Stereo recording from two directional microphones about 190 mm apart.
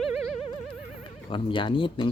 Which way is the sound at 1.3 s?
25° left (ahead or behind).